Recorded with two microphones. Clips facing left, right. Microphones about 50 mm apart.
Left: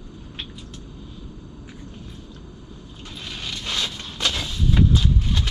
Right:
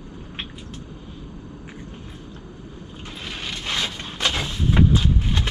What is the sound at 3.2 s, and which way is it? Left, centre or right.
Vehicle, right.